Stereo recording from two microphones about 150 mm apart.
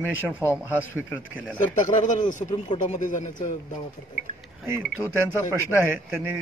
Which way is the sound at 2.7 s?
30° left (ahead or behind).